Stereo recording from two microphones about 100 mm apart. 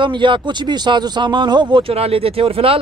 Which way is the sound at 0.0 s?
55° right (ahead or behind).